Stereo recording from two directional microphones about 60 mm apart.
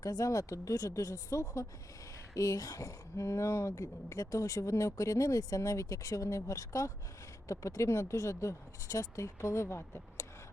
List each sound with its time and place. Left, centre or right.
0.0 s speech: left
2.3 s speech: left